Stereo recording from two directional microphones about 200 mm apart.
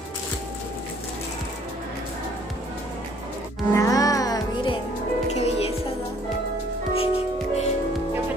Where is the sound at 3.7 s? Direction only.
15° left (ahead or behind).